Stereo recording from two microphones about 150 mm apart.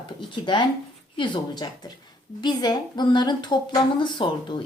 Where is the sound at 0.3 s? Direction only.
35° left (ahead or behind).